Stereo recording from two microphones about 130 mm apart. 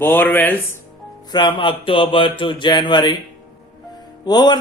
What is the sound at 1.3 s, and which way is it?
Speech, 35° left (ahead or behind).